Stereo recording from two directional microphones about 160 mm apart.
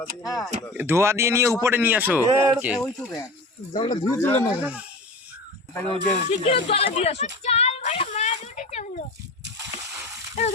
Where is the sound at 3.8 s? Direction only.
25° left (ahead or behind).